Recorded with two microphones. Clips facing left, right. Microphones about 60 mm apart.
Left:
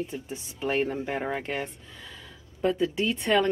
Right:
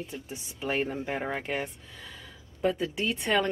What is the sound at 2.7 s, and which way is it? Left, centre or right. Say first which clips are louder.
Speech: left 4 dB; centre.